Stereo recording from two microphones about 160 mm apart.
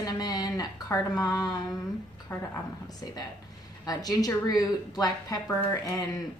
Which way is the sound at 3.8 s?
25° left (ahead or behind).